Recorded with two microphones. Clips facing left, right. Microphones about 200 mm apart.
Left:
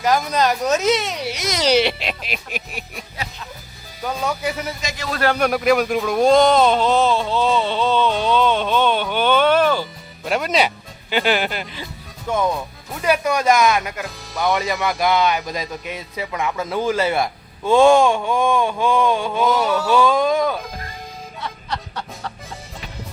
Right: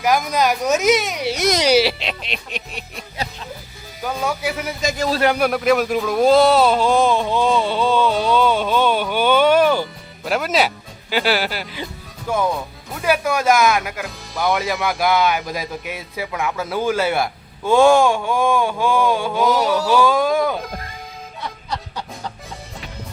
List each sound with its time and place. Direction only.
0.0 s speech: 10° right (ahead or behind)
3.2 s chicken: 35° right (ahead or behind)
4.0 s speech: 5° right (ahead or behind)
4.8 s speech: 45° right (ahead or behind)
5.2 s speech: 10° right (ahead or behind)
5.5 s speech: centre (ahead or behind)
10.2 s speech: centre (ahead or behind)